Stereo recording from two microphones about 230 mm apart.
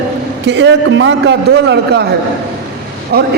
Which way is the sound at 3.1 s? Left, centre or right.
Right.